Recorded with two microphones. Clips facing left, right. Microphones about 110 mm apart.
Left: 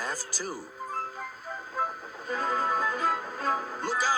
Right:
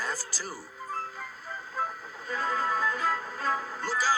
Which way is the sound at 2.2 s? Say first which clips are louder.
Left 1 dB; 45° left (ahead or behind).